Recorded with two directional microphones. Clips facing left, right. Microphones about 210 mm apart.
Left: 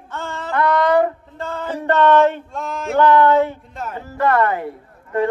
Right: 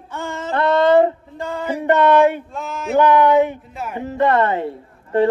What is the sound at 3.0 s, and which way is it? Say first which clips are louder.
Speech: even; 15° right (ahead or behind).